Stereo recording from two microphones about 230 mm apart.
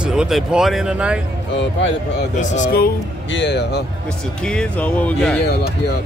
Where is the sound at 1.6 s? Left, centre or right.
Left.